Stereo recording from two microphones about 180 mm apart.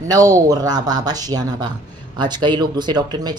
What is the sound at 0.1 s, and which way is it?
Speech, 20° right (ahead or behind).